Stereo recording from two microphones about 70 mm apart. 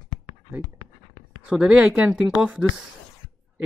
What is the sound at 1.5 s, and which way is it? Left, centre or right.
Speech, centre.